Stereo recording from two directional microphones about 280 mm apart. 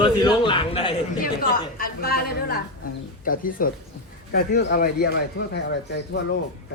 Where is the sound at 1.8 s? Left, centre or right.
Left.